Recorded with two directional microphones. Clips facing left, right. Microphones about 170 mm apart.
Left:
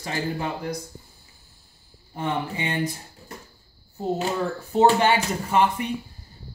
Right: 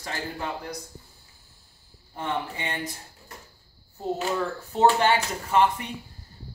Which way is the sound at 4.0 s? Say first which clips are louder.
Left 2 dB; 15° left (ahead or behind).